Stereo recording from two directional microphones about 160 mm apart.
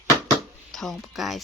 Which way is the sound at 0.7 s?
Centre (ahead or behind).